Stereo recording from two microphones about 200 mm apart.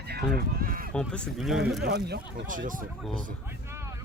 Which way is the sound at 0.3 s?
45° right (ahead or behind).